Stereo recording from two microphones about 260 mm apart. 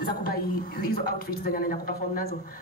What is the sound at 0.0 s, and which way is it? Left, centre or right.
A woman's voice, left.